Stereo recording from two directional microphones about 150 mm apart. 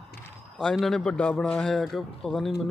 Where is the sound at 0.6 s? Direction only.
5° left (ahead or behind).